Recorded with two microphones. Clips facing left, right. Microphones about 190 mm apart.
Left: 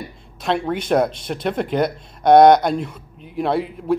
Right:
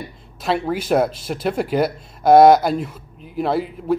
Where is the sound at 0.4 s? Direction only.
5° right (ahead or behind).